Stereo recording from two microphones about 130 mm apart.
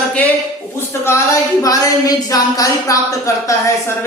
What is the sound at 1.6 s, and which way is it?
A woman's voice, 30° left (ahead or behind).